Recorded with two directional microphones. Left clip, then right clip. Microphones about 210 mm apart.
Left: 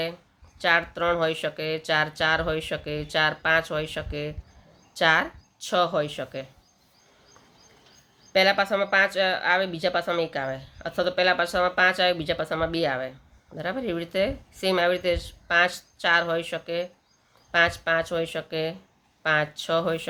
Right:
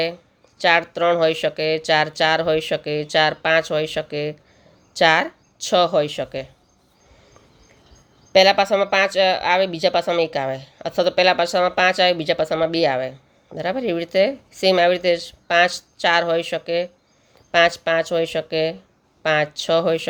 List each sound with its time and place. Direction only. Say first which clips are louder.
0.6 s speech: right 6 dB; 25° right (ahead or behind)
8.3 s speech: right 7 dB; 30° right (ahead or behind)